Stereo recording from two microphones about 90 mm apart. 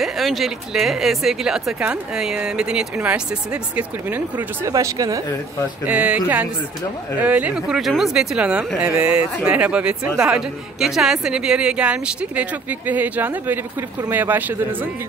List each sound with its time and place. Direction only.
0.0 s speech: centre (ahead or behind); by 4.5 s 20° right (ahead or behind)
4.6 s speech: 35° right (ahead or behind)
5.9 s speech: 15° right (ahead or behind)
7.6 s speech: 5° right (ahead or behind); by 14.9 s 20° right (ahead or behind)